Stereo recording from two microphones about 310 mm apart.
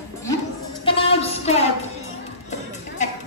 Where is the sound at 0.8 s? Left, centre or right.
Centre.